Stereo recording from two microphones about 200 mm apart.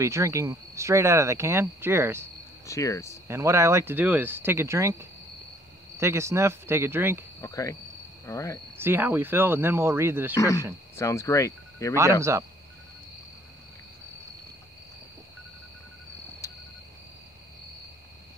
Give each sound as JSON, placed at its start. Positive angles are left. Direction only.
{"t": 0.0, "sound": "speech", "side_deg": -15}
{"t": 2.6, "sound": "speech", "side_deg": 15}
{"t": 3.3, "sound": "speech", "side_deg": -15}
{"t": 7.4, "sound": "speech", "side_deg": 15}
{"t": 8.7, "sound": "speech", "side_deg": -10}
{"t": 10.3, "sound": "speech", "side_deg": 15}
{"t": 12.2, "sound": "speech", "side_deg": -15}